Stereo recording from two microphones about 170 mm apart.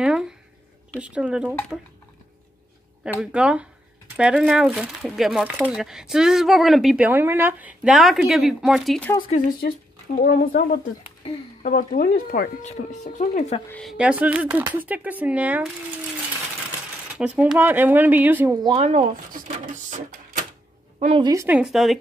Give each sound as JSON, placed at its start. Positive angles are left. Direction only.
{"t": 0.0, "sound": "speech", "side_deg": -5}
{"t": 3.0, "sound": "speech", "side_deg": -5}
{"t": 9.3, "sound": "speech", "side_deg": 55}
{"t": 12.6, "sound": "a woman's voice", "side_deg": 45}
{"t": 13.7, "sound": "speech", "side_deg": 5}
{"t": 13.9, "sound": "speech", "side_deg": -5}
{"t": 17.1, "sound": "speech", "side_deg": -5}
{"t": 18.8, "sound": "speech", "side_deg": -45}
{"t": 21.2, "sound": "a woman's voice", "side_deg": -20}
{"t": 21.5, "sound": "speech", "side_deg": -5}